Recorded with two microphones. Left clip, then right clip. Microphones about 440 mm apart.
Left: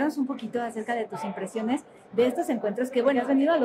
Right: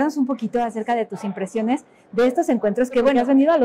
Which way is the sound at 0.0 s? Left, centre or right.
Right.